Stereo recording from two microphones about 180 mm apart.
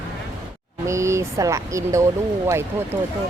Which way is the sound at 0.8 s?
15° right (ahead or behind).